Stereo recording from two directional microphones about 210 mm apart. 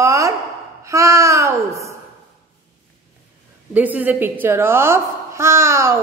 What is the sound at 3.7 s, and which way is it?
A woman's voice, 10° right (ahead or behind).